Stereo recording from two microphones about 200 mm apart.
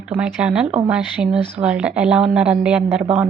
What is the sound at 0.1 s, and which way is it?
A woman's voice, 5° right (ahead or behind).